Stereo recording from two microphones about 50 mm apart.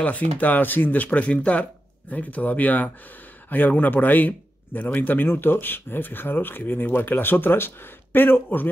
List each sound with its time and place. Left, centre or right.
0.0 s speech: left